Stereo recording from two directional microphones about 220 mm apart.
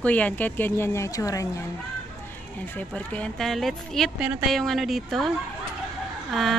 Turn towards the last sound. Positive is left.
turn(degrees=0)  # may be behind; listen again after turning